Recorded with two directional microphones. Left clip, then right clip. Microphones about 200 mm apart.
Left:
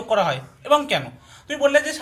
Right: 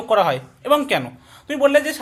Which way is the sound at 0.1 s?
45° right (ahead or behind).